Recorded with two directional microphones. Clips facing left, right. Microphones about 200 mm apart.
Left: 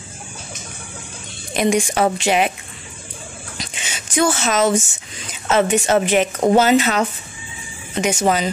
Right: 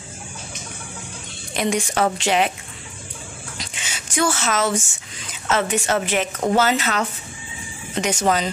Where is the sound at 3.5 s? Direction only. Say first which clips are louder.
Left 5 dB; 20° left (ahead or behind).